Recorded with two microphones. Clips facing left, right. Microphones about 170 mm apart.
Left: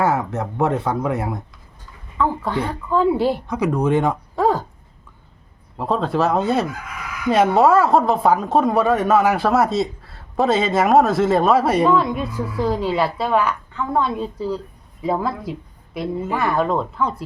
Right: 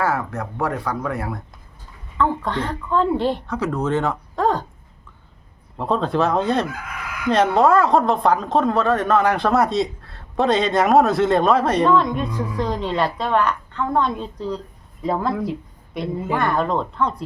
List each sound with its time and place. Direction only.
0.0 s speech: 20° left (ahead or behind)
2.1 s speech: 5° left (ahead or behind)
5.7 s a woman's voice: centre (ahead or behind)